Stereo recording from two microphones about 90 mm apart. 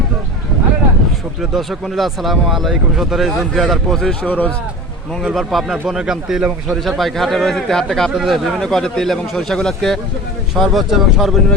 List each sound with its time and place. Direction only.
1.4 s speech: centre (ahead or behind)
4.3 s speech: 15° left (ahead or behind)
5.2 s speech: centre (ahead or behind)